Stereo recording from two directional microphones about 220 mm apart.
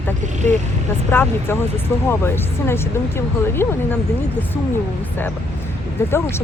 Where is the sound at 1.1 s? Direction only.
10° left (ahead or behind).